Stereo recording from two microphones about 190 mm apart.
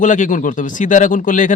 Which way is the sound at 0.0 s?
40° left (ahead or behind).